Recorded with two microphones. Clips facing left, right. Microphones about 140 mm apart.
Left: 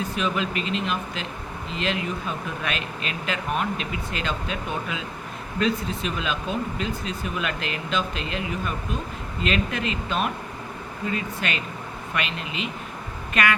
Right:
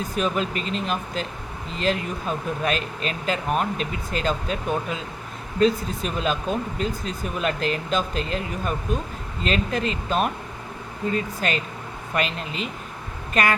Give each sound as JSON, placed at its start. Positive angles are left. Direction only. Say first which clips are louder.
{"t": 0.2, "sound": "speech", "louder": "right 3 dB", "side_deg": -40}